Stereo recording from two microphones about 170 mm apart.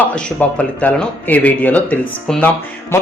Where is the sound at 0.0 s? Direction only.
10° left (ahead or behind).